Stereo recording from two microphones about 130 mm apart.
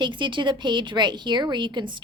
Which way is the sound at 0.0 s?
40° right (ahead or behind).